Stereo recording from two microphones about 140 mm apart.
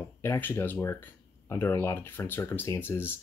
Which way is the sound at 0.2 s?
15° left (ahead or behind).